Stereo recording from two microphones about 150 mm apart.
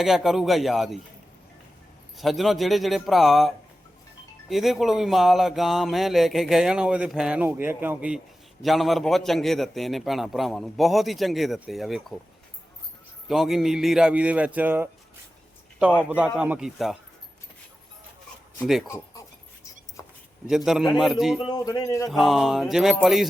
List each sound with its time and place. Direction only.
0.0 s speech: centre (ahead or behind)
2.1 s speech: centre (ahead or behind)
13.2 s a man's voice: centre (ahead or behind)
18.9 s dog: 20° left (ahead or behind)
20.9 s speech: centre (ahead or behind)
21.5 s speech: 25° left (ahead or behind)
22.1 s speech: centre (ahead or behind)